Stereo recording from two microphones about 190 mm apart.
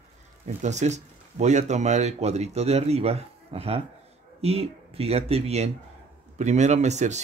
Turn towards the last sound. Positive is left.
turn(degrees=-35)  # may be behind; listen again after turning